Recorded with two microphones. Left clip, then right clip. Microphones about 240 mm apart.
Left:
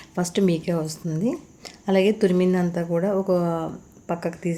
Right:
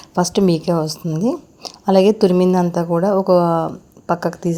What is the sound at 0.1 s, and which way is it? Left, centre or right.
A woman's voice, right.